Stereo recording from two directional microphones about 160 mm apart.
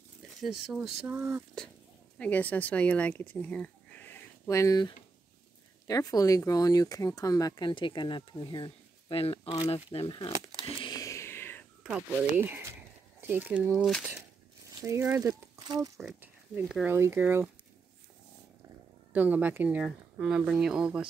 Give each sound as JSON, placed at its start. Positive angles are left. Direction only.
{"t": 0.4, "sound": "speech", "side_deg": -5}
{"t": 1.0, "sound": "speech", "side_deg": -15}
{"t": 2.1, "sound": "speech", "side_deg": 10}
{"t": 10.8, "sound": "a sound", "side_deg": 25}
{"t": 11.8, "sound": "speech", "side_deg": -10}
{"t": 14.8, "sound": "speech", "side_deg": -15}
{"t": 16.0, "sound": "speech", "side_deg": 0}
{"t": 16.9, "sound": "speech", "side_deg": -15}
{"t": 19.1, "sound": "speech", "side_deg": -10}